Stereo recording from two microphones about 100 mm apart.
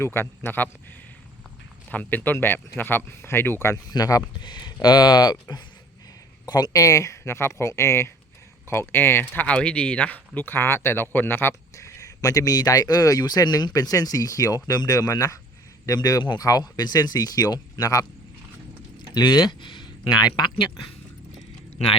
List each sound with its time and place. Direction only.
0.0 s speech: 25° left (ahead or behind)
1.9 s speech: 15° left (ahead or behind)
3.9 s speech: 35° left (ahead or behind)
4.4 s speech: 45° left (ahead or behind)
19.1 s speech: 45° left (ahead or behind)